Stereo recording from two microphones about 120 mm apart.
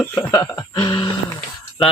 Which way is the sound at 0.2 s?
30° left (ahead or behind).